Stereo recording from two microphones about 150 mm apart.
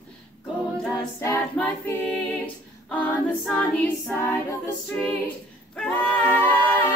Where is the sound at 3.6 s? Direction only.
10° left (ahead or behind).